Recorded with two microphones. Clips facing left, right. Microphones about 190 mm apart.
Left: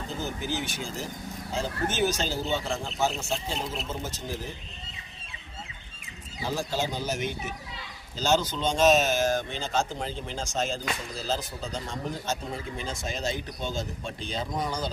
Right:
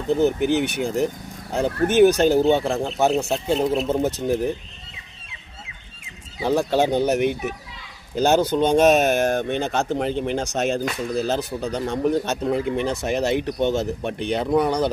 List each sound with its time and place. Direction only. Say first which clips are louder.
0.1 s speech: right 16 dB; 65° right (ahead or behind)
6.4 s speech: right 10 dB; 65° right (ahead or behind)